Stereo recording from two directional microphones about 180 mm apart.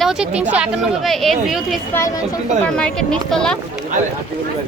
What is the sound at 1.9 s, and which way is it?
Speech, 20° left (ahead or behind).